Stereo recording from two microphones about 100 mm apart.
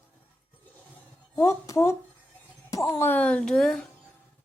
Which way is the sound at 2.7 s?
30° left (ahead or behind).